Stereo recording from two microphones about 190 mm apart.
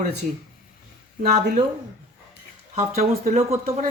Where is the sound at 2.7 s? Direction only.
40° right (ahead or behind).